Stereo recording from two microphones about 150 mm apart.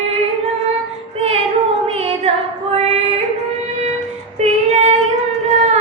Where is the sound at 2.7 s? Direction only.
45° right (ahead or behind).